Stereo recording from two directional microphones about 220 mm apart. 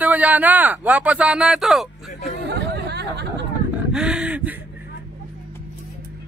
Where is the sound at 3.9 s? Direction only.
5° right (ahead or behind).